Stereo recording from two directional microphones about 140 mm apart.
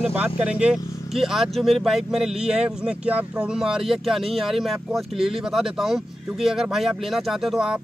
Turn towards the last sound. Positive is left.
turn(degrees=-5)  # may be behind; listen again after turning